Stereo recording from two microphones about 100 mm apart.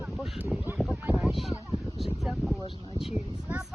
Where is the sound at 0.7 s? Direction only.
20° right (ahead or behind).